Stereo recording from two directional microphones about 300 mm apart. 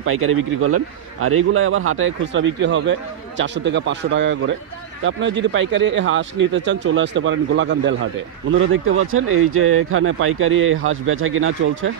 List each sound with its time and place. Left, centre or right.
0.0 s speech: right